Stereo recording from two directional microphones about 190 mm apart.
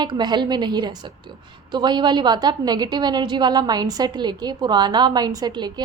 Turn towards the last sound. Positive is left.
turn(degrees=-20)  # may be behind; listen again after turning